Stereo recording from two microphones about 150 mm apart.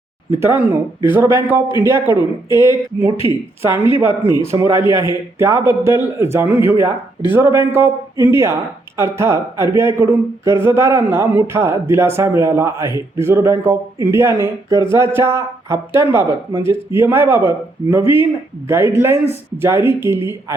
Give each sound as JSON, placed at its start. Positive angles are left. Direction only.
{"t": 0.3, "sound": "speech", "side_deg": -15}